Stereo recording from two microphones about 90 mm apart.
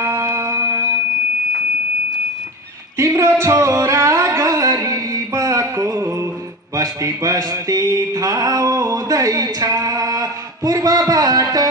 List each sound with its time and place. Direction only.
0.0 s music: 30° right (ahead or behind)
3.0 s music: 35° right (ahead or behind)